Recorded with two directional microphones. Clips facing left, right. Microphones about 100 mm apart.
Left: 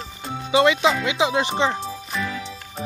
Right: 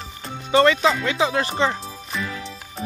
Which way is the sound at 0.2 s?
10° left (ahead or behind).